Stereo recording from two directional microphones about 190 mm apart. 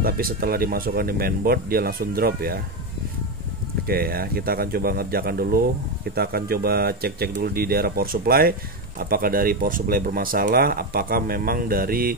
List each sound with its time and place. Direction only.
0.0 s speech: 50° right (ahead or behind)
3.8 s speech: 50° right (ahead or behind)